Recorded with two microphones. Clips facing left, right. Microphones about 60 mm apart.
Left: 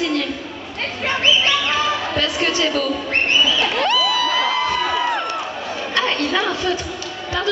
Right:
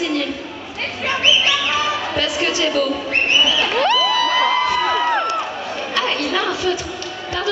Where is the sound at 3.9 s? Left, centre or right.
Right.